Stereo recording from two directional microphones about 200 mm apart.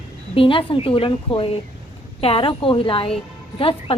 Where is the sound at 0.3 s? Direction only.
25° left (ahead or behind).